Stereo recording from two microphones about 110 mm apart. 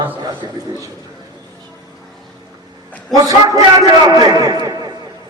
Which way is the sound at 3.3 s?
30° right (ahead or behind).